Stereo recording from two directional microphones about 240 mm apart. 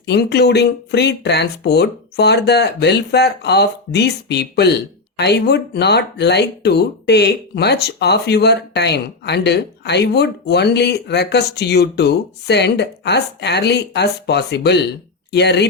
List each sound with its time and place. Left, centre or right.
0.0 s speech: left